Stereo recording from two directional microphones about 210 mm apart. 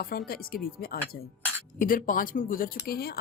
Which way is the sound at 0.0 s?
45° left (ahead or behind).